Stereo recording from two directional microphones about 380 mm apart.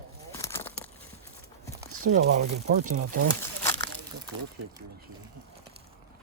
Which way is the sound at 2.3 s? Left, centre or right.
Centre.